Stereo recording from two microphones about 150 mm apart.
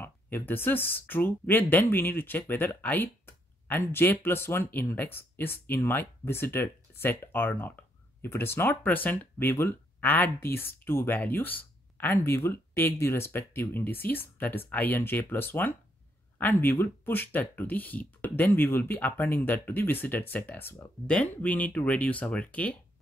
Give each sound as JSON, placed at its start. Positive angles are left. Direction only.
{"t": 0.0, "sound": "speech", "side_deg": 15}